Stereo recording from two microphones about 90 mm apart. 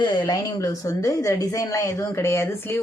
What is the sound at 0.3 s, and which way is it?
Speech, 40° left (ahead or behind).